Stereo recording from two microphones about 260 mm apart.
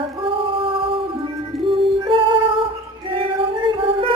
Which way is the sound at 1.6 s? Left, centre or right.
Centre.